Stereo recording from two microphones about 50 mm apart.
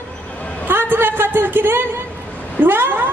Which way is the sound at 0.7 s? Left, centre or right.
Right.